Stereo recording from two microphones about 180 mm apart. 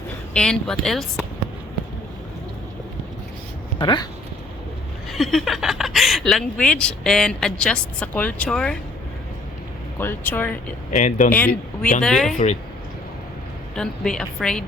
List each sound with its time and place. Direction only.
0.3 s speech: 5° left (ahead or behind)
3.8 s speech: 25° left (ahead or behind)
5.1 s speech: centre (ahead or behind)
10.0 s speech: 10° left (ahead or behind)
10.9 s speech: 45° left (ahead or behind)
11.3 s speech: 10° left (ahead or behind)
13.7 s speech: 5° left (ahead or behind)